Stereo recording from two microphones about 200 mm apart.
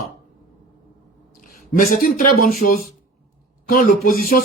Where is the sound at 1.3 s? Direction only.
40° left (ahead or behind).